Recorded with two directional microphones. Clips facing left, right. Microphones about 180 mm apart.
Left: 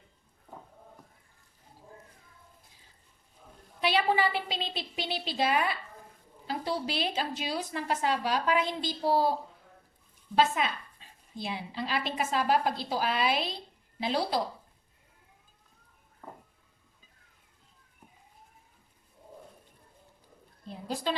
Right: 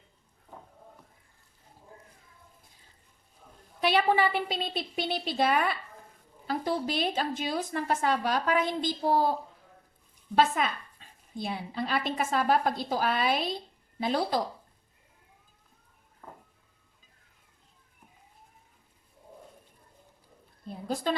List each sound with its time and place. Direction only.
3.8 s a woman's voice: 50° right (ahead or behind)
10.3 s a woman's voice: 50° right (ahead or behind)
20.7 s a sound: 50° right (ahead or behind)